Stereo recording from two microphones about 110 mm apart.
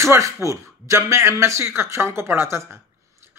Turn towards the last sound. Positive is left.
turn(degrees=-25)  # may be behind; listen again after turning